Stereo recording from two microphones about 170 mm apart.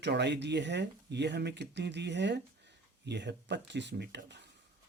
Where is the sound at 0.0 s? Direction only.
85° right.